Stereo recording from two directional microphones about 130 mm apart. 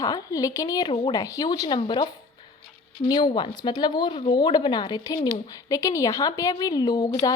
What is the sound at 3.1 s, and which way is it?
Speech, 35° left (ahead or behind).